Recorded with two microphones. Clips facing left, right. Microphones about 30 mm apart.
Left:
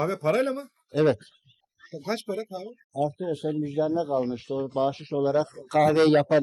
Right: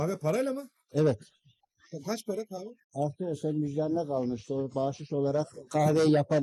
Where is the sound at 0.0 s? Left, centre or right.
Left.